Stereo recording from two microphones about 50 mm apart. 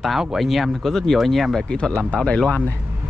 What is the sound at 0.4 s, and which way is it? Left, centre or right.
Speech, centre.